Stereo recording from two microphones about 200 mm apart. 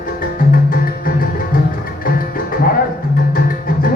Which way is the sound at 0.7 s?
45° left (ahead or behind).